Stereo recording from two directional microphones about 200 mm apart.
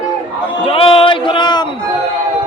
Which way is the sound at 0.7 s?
25° left (ahead or behind).